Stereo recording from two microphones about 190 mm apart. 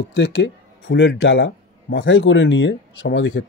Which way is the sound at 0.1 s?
65° left (ahead or behind).